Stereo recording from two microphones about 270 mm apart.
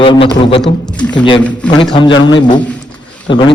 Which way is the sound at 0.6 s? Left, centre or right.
Centre.